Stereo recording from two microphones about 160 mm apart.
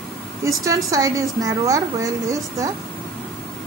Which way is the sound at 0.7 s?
20° right (ahead or behind).